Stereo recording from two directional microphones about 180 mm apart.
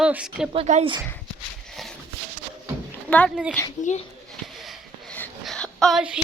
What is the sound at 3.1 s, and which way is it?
Speech, 5° left (ahead or behind).